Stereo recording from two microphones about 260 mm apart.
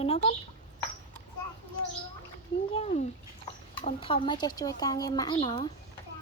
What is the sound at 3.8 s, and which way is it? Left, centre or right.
Speech, left.